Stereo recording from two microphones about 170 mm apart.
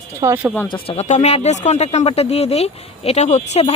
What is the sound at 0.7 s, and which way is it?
Speech, 35° left (ahead or behind).